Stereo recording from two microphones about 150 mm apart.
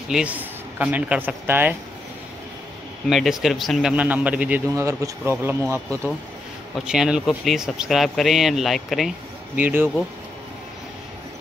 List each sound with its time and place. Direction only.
0.1 s speech: 10° right (ahead or behind)
3.1 s speech: centre (ahead or behind)
4.7 s speech: 20° right (ahead or behind)
6.7 s speech: 5° right (ahead or behind)
9.6 s speech: 10° right (ahead or behind)